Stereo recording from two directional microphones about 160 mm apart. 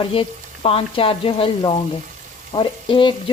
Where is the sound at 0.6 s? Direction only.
35° left (ahead or behind).